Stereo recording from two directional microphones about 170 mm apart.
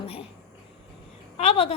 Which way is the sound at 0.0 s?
35° left (ahead or behind).